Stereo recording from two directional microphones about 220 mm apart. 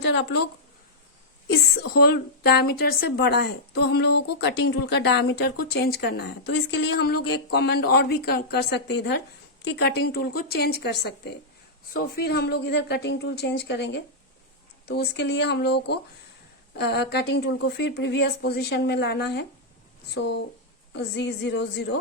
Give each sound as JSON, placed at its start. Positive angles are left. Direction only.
{"t": 0.0, "sound": "speech", "side_deg": 55}
{"t": 1.5, "sound": "speech", "side_deg": 50}
{"t": 20.9, "sound": "speech", "side_deg": 50}